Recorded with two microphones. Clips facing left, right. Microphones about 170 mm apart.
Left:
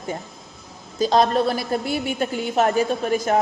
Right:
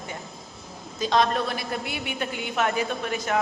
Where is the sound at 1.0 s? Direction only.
35° left (ahead or behind).